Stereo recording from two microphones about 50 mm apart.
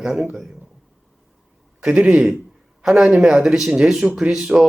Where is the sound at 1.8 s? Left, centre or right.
Centre.